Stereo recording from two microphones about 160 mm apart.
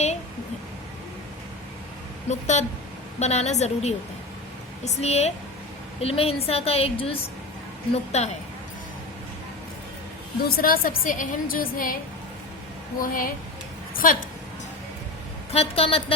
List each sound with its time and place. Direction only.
2.3 s a woman's voice: 45° left (ahead or behind)
10.5 s a woman's voice: 65° left (ahead or behind)
13.0 s a woman's voice: 60° left (ahead or behind)
15.5 s a woman's voice: 35° left (ahead or behind)